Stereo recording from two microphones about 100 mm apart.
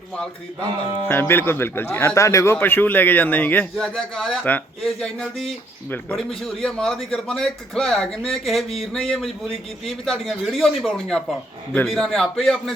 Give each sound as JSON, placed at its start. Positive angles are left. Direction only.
{"t": 1.0, "sound": "a man's voice", "side_deg": 25}
{"t": 3.8, "sound": "a man's voice", "side_deg": 5}